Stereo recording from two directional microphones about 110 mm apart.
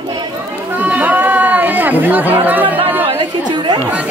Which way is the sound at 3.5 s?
45° right (ahead or behind).